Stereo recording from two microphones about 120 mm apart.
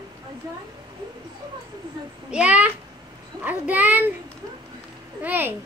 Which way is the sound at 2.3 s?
10° right (ahead or behind).